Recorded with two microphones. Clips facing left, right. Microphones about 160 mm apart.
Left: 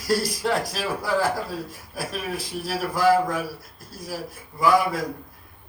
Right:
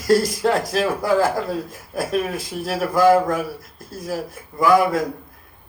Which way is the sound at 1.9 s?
45° right (ahead or behind).